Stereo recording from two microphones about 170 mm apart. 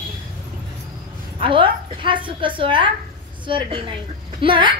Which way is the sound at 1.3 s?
30° right (ahead or behind).